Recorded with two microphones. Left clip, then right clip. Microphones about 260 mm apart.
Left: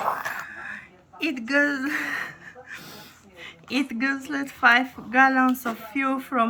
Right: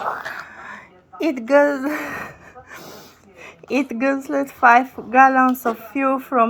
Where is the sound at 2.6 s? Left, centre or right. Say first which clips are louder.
Right 3 dB; centre.